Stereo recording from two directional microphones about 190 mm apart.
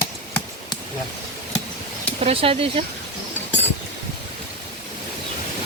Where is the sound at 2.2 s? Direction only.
30° right (ahead or behind).